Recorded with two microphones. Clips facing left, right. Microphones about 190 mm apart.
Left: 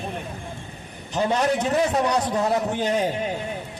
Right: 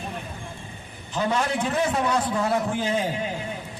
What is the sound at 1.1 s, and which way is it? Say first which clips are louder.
A man's voice: left 3 dB; 40° left (ahead or behind).